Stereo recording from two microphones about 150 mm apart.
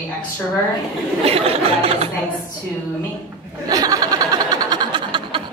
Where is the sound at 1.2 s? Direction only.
40° right (ahead or behind).